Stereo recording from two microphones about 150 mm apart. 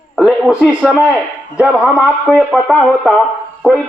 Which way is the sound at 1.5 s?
10° right (ahead or behind).